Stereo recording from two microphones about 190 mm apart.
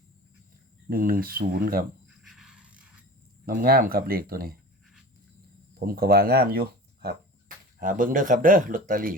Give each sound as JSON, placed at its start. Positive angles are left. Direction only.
{"t": 0.9, "sound": "speech", "side_deg": -50}
{"t": 2.2, "sound": "a sound", "side_deg": 0}
{"t": 3.4, "sound": "speech", "side_deg": -50}
{"t": 5.8, "sound": "speech", "side_deg": -50}